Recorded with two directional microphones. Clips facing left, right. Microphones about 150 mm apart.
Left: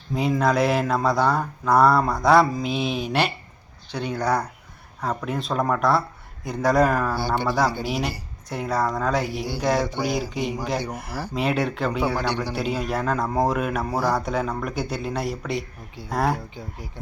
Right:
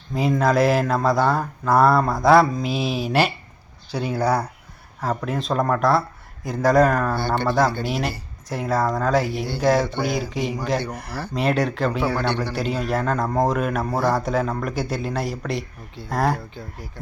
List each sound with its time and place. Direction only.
0.1 s speech: centre (ahead or behind)
12.1 s speech: 10° left (ahead or behind)
12.5 s speech: centre (ahead or behind)